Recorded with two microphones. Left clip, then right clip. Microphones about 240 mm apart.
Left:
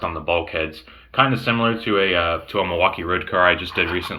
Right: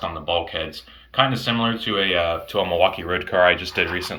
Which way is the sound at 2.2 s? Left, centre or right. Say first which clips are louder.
Left 1 dB; right.